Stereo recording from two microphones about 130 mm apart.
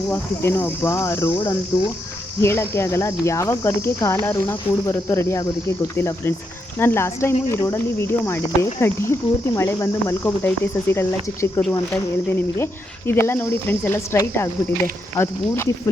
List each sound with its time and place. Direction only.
0.1 s speech: 15° left (ahead or behind)
13.1 s speech: 20° left (ahead or behind)